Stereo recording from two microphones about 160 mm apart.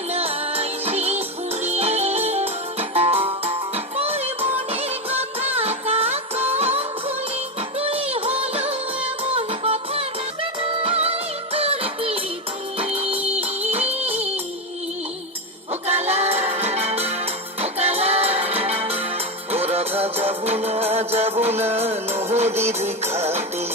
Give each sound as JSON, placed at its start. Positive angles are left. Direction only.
{"t": 0.1, "sound": "music", "side_deg": -40}
{"t": 15.9, "sound": "music", "side_deg": -40}